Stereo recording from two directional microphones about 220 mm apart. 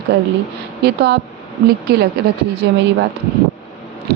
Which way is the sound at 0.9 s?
50° right (ahead or behind).